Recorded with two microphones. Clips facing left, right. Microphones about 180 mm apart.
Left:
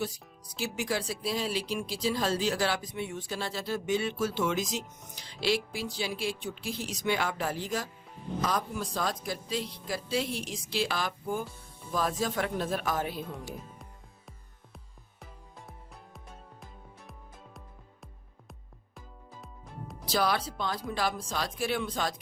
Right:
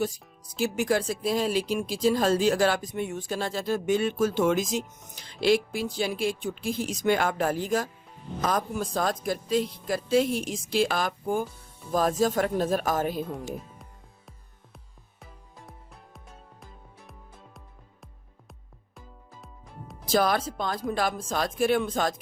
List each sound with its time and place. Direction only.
0.0 s speech: 50° right (ahead or behind)
20.1 s speech: 50° right (ahead or behind)